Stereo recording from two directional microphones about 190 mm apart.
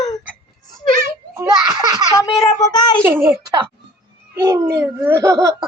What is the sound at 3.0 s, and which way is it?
Speech, 10° right (ahead or behind).